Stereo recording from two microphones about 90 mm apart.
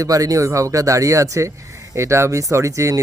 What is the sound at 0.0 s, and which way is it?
Speech, 40° right (ahead or behind).